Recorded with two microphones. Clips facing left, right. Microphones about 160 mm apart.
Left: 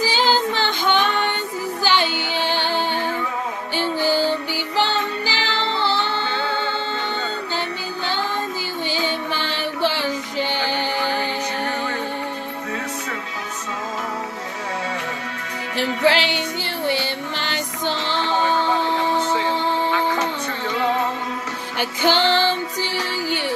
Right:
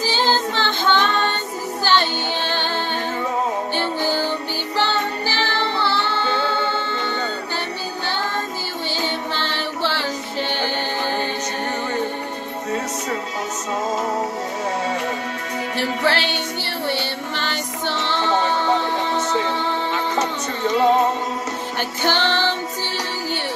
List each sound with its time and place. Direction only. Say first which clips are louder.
0.0 s music: left 1 dB; 15° left (ahead or behind)
4.0 s music: left 5 dB; 15° right (ahead or behind)
4.7 s music: even; 15° left (ahead or behind)
8.9 s music: even; 15° left (ahead or behind)
16.0 s music: left 5 dB; 15° left (ahead or behind)
20.2 s music: right 1 dB; 40° right (ahead or behind)
21.7 s music: left 3 dB; 15° left (ahead or behind)